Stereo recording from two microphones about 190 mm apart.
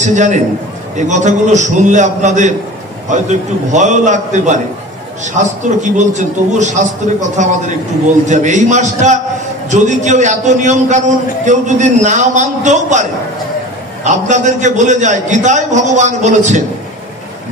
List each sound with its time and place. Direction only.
0.0 s a man's voice: 40° right (ahead or behind)
14.0 s a man's voice: 40° right (ahead or behind)